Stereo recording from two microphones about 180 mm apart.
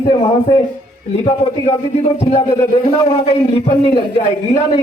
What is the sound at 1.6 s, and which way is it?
A man's voice, 35° left (ahead or behind).